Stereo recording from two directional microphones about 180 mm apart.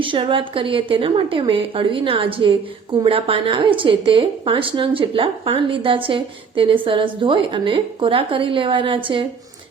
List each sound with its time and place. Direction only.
0.0 s a woman's voice: 30° right (ahead or behind)